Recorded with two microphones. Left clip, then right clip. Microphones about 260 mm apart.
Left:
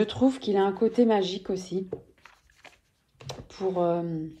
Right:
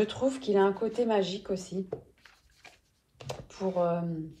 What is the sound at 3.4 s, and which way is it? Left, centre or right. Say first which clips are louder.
Speech: left 3 dB; left.